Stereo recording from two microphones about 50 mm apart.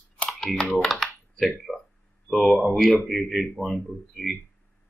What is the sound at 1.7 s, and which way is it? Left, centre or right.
Speech, centre.